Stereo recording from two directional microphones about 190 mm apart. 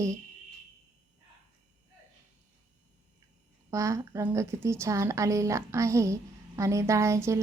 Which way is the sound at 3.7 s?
15° right (ahead or behind).